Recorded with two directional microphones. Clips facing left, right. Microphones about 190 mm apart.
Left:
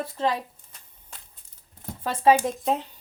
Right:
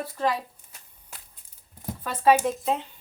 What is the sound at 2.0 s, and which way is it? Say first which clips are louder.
Speech: left 1 dB; 30° left (ahead or behind).